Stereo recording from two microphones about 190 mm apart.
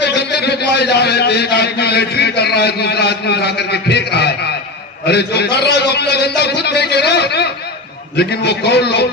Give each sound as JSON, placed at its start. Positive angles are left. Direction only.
{"t": 0.0, "sound": "a man's voice", "side_deg": 60}